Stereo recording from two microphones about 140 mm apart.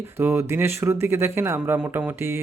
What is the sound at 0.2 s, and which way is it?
Speech, 15° right (ahead or behind).